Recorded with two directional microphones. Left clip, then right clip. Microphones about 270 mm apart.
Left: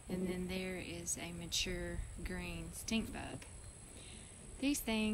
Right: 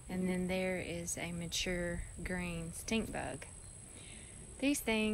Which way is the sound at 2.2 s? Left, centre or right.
Centre.